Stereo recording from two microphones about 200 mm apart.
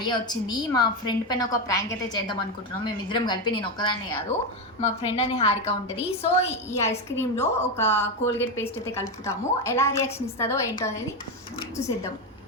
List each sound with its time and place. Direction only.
0.0 s a woman's voice: 20° left (ahead or behind)
6.3 s a woman's voice: 15° left (ahead or behind)